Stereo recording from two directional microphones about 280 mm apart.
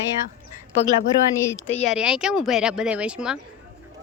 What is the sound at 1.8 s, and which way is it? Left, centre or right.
Speech, centre.